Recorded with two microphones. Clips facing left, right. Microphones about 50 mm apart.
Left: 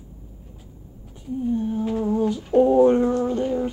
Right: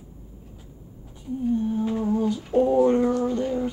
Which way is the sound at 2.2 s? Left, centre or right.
Left.